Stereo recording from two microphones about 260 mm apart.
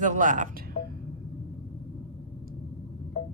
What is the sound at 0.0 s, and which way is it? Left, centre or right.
Speech, right.